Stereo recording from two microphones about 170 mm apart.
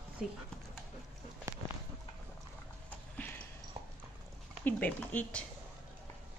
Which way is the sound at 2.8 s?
10° left (ahead or behind).